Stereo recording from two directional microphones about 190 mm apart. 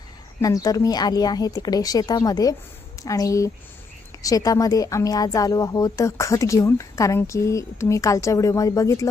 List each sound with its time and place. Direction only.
0.4 s a woman's voice: 20° left (ahead or behind)